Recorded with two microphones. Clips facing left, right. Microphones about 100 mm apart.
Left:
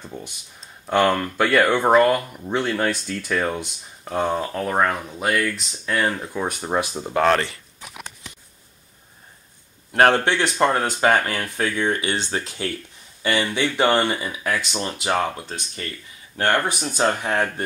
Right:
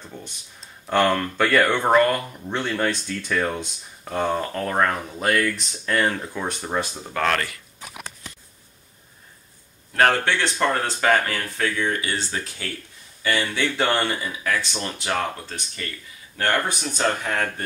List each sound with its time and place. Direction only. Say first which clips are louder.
0.8 s speech: left 1 dB; 5° left (ahead or behind)
7.0 s speech: left 7 dB; 25° left (ahead or behind)
9.9 s speech: left 3 dB; 25° left (ahead or behind)